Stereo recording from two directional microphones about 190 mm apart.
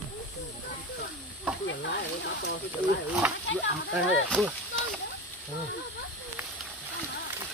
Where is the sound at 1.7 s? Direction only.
65° left (ahead or behind).